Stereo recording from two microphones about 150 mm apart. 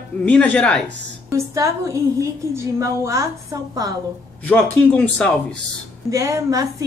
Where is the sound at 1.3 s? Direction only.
20° right (ahead or behind).